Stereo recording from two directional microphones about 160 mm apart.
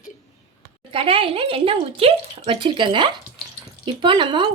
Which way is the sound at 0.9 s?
35° right (ahead or behind).